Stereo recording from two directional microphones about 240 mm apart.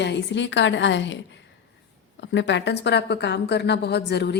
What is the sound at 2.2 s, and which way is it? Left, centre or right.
A woman's voice, left.